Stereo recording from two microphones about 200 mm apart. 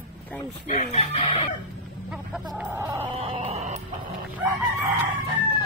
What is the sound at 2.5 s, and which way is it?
Music, 10° right (ahead or behind).